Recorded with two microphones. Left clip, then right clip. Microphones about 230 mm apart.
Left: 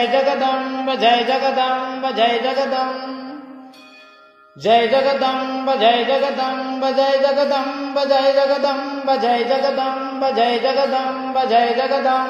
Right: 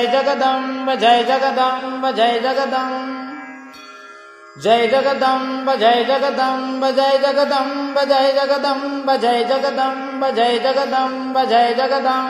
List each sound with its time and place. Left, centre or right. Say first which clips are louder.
0.0 s mantra: right 1 dB; right
4.6 s mantra: even; right